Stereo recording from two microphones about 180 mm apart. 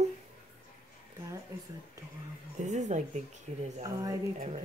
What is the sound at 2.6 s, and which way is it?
Speech, 40° right (ahead or behind).